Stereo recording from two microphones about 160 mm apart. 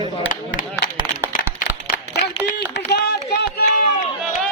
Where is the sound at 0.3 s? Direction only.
60° left (ahead or behind).